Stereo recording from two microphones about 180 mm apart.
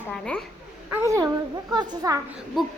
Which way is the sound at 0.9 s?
15° right (ahead or behind).